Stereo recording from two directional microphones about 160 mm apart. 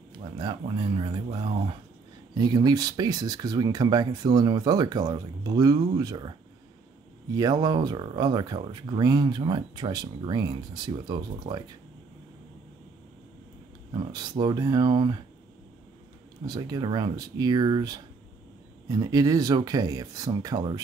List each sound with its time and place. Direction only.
0.4 s speech: 30° right (ahead or behind)
7.3 s speech: 25° right (ahead or behind)
13.9 s speech: 25° right (ahead or behind)
16.4 s speech: 25° right (ahead or behind)